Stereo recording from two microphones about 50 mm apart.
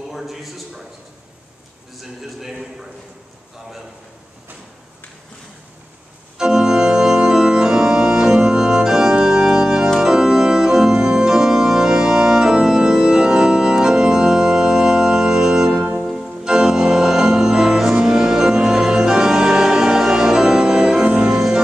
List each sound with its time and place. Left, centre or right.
0.1 s a man's voice: centre
2.0 s a man's voice: centre
6.3 s organ: centre
15.8 s music: right
16.1 s organ: centre
21.0 s music: right